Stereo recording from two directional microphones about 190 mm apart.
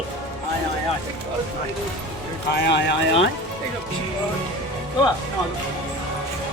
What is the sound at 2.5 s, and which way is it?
Speech, 65° left (ahead or behind).